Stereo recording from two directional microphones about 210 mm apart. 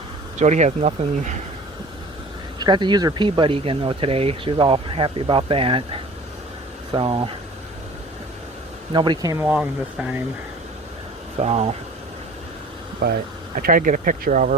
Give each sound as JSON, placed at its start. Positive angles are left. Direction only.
{"t": 0.3, "sound": "speech", "side_deg": -35}
{"t": 2.6, "sound": "speech", "side_deg": -20}
{"t": 8.9, "sound": "speech", "side_deg": -20}
{"t": 11.3, "sound": "speech", "side_deg": -30}
{"t": 13.0, "sound": "speech", "side_deg": -45}